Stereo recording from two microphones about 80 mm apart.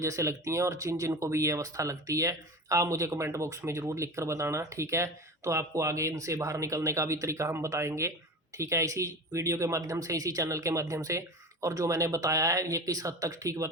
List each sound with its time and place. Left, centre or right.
0.0 s speech: right